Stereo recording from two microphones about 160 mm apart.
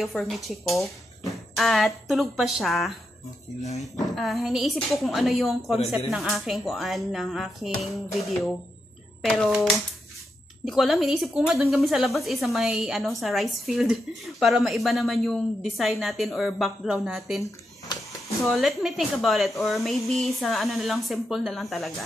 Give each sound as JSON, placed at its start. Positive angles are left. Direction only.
{"t": 0.0, "sound": "speech", "side_deg": 0}
{"t": 17.5, "sound": "a sound", "side_deg": 20}
{"t": 18.4, "sound": "speech", "side_deg": 0}